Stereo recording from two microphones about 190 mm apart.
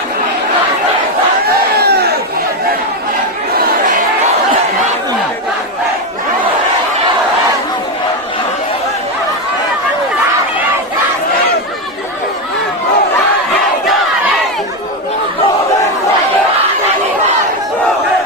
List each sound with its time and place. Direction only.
1.5 s crowd: 55° right (ahead or behind)